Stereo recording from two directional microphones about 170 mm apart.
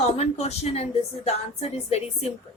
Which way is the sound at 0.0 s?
40° left (ahead or behind).